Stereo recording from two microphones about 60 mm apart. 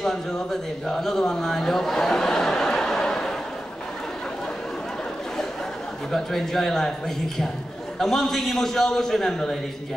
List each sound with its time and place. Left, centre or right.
0.0 s speech: centre
6.1 s a man's voice: centre
8.0 s a man's voice: centre